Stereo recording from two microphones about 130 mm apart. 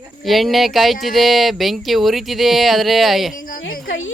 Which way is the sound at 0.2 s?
Centre (ahead or behind).